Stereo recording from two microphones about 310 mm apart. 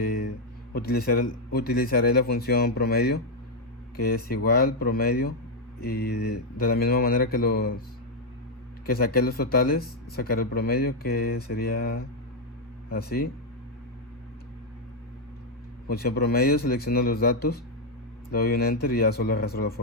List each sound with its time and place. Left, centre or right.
0.0 s a sound: left
0.7 s speech: left
8.9 s speech: left
15.9 s speech: left